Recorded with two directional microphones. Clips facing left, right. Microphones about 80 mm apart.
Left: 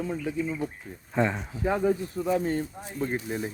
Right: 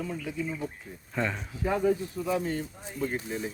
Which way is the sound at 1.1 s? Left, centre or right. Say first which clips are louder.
Left 5 dB; left.